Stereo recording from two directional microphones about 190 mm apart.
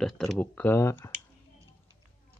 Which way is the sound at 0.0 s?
5° left (ahead or behind).